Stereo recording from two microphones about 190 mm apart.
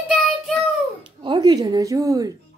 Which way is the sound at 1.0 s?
25° right (ahead or behind).